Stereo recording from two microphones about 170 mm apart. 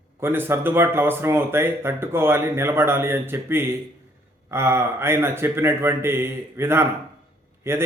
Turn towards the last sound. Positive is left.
turn(degrees=-15)  # may be behind; listen again after turning